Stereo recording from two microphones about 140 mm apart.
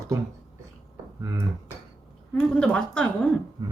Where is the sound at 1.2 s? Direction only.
20° right (ahead or behind).